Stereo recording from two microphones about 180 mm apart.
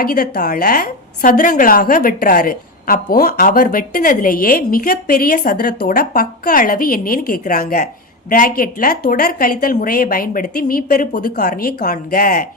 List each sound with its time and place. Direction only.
0.0 s a woman's voice: 55° left (ahead or behind)